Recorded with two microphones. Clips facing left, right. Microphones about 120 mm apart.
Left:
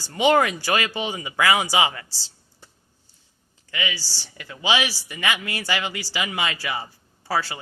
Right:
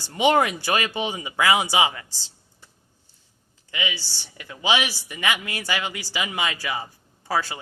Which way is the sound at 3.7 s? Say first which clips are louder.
Left 1 dB; 15° right (ahead or behind).